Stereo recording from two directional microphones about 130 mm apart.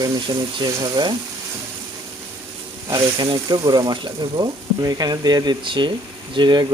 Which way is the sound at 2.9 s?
35° right (ahead or behind).